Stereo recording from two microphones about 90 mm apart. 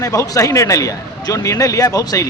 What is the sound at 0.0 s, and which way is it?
Speech, 35° left (ahead or behind).